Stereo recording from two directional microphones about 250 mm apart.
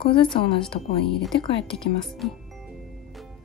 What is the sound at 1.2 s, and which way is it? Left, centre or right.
Speech, centre.